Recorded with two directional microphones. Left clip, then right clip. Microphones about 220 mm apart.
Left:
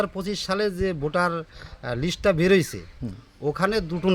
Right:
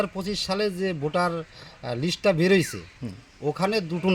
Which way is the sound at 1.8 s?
5° left (ahead or behind).